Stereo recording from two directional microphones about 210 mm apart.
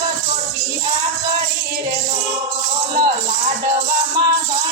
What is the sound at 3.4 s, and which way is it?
Music, 30° right (ahead or behind).